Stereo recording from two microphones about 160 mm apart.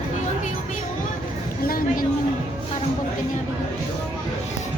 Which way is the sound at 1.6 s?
65° left (ahead or behind).